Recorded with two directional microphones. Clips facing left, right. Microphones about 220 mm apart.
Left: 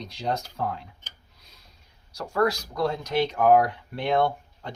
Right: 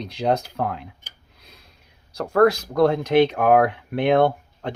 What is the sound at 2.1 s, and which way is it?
Speech, 60° right (ahead or behind).